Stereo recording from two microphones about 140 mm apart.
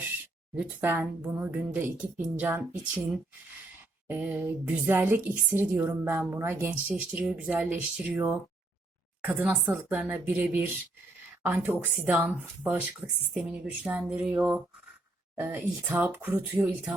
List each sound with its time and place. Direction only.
0.5 s a woman's voice: 10° right (ahead or behind)
4.1 s a woman's voice: 10° right (ahead or behind)